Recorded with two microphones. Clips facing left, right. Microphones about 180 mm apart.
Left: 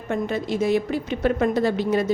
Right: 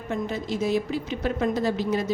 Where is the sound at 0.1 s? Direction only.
60° left (ahead or behind).